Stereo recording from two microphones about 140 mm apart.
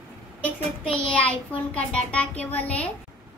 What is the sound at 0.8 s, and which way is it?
Child singing, 10° left (ahead or behind).